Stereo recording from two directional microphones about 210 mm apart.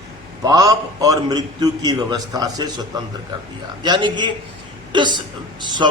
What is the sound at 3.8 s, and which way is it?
A man's voice, 20° right (ahead or behind).